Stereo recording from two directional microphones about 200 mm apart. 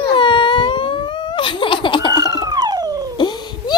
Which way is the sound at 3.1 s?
20° left (ahead or behind).